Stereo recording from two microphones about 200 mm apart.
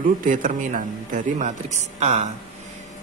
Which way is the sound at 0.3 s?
40° right (ahead or behind).